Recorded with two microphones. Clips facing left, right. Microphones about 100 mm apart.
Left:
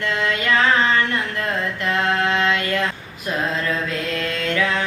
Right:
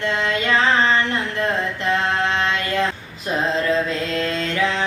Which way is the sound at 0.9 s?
25° right (ahead or behind).